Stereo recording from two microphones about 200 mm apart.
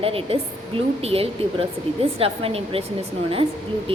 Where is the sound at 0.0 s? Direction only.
30° right (ahead or behind).